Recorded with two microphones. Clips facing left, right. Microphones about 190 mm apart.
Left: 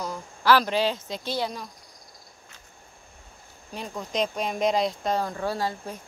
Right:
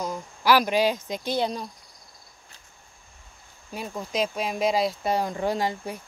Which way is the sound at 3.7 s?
5° right (ahead or behind).